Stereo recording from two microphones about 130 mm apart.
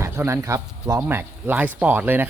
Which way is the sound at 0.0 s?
20° right (ahead or behind).